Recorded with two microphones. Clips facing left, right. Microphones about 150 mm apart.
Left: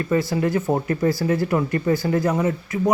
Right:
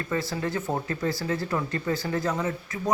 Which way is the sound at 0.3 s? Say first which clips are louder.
Left 8 dB; 15° left (ahead or behind).